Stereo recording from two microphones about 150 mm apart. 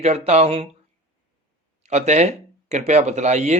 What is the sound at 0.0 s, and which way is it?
Speech, 45° right (ahead or behind).